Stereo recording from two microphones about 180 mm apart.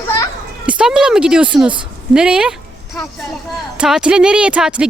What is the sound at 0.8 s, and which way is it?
A woman's voice, 5° right (ahead or behind).